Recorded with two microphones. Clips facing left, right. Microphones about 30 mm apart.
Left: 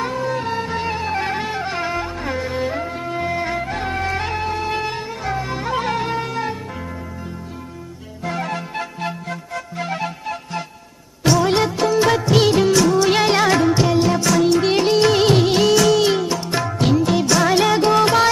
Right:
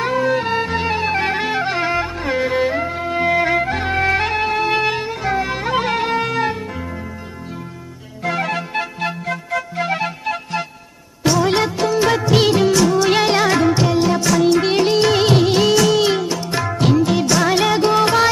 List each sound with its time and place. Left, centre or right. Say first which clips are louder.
0.0 s music: right 5 dB; right
0.7 s music: right 3 dB; right
2.6 s music: right 4 dB; centre
3.2 s music: right 7 dB; right
8.2 s music: right 4 dB; right
11.3 s music: even; centre